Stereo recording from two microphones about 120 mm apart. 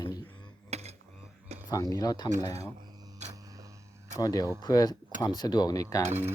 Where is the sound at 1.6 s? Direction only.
30° left (ahead or behind).